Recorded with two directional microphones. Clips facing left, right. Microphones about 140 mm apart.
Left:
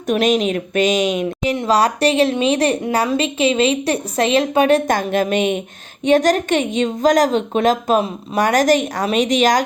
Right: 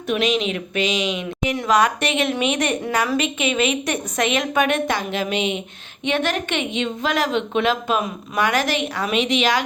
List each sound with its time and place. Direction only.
0.1 s a woman's voice: 45° left (ahead or behind)
1.5 s a woman's voice: 30° left (ahead or behind)
4.9 s a woman's voice: 45° left (ahead or behind)